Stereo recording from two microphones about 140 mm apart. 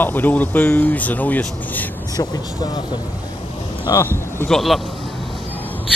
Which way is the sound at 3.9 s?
25° left (ahead or behind).